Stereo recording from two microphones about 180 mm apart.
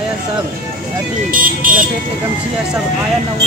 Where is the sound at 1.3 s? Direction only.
50° right (ahead or behind).